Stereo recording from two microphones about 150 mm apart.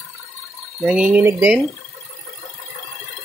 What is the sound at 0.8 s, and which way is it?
Speech, 5° right (ahead or behind).